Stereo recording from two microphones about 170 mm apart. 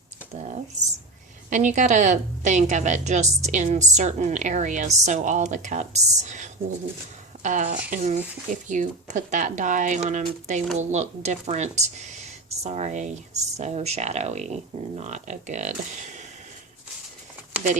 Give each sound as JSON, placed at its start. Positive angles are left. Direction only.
{"t": 0.3, "sound": "typing", "side_deg": -45}
{"t": 1.5, "sound": "speech", "side_deg": -45}